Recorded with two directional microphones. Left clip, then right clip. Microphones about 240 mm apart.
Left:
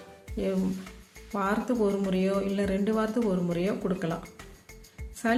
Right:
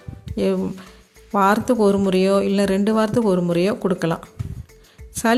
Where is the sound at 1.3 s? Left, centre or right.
Right.